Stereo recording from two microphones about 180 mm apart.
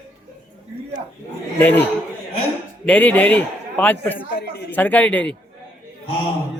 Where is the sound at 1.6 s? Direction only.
10° left (ahead or behind).